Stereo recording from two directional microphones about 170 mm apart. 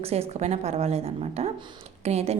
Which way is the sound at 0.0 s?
40° right (ahead or behind).